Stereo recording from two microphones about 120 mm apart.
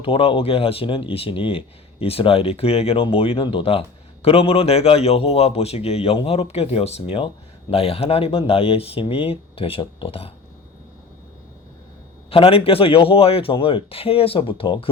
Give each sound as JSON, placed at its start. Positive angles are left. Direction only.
{"t": 0.0, "sound": "speech", "side_deg": 50}
{"t": 12.3, "sound": "speech", "side_deg": 50}